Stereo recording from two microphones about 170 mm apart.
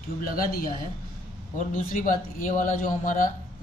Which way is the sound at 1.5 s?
50° left (ahead or behind).